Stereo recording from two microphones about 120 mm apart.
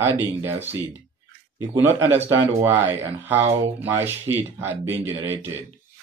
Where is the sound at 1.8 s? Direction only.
20° right (ahead or behind).